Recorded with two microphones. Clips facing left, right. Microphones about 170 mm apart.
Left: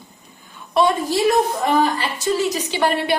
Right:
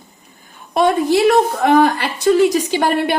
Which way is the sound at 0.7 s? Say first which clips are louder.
Right 4 dB; 60° right (ahead or behind).